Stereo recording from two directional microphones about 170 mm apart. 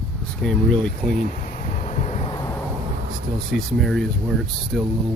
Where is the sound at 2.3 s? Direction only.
20° left (ahead or behind).